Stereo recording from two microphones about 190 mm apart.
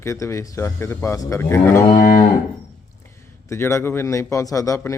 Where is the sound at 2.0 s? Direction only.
45° left (ahead or behind).